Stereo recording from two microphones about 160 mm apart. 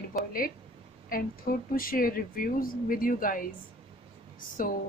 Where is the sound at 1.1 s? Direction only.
65° left (ahead or behind).